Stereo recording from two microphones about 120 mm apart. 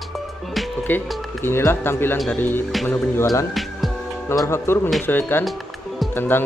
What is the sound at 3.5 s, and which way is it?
Music, centre (ahead or behind).